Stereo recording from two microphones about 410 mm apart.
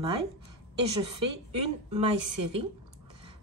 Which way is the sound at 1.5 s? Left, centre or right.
Centre.